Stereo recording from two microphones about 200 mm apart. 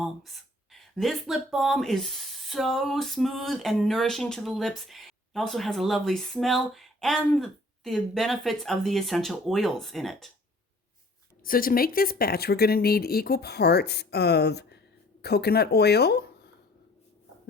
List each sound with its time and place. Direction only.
0.7 s speech: centre (ahead or behind)
11.4 s speech: 45° left (ahead or behind)